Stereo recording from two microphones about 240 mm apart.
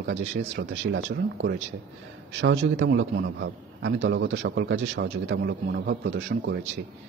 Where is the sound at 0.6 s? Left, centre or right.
Right.